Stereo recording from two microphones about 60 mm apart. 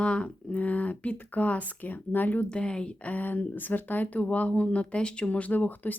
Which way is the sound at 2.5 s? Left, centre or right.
Centre.